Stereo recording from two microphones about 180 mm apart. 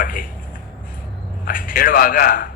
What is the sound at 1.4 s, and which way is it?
A man's voice, 50° left (ahead or behind).